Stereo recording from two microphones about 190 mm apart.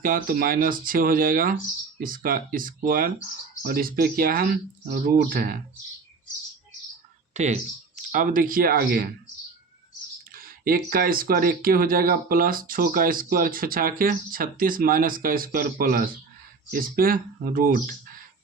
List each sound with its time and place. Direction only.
0.0 s speech: 50° right (ahead or behind)
7.3 s speech: 35° right (ahead or behind)
10.3 s speech: 50° right (ahead or behind)